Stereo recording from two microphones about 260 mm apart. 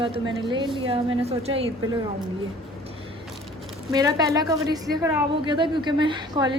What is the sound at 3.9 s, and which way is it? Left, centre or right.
A woman's voice, centre.